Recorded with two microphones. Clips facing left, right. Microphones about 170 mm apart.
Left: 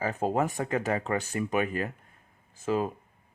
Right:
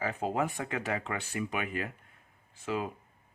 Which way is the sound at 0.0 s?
40° left (ahead or behind).